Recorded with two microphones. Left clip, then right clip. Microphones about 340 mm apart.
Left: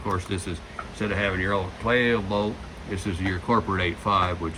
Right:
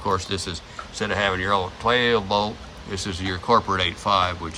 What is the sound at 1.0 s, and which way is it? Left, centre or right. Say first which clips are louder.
Speech: right 3 dB; centre.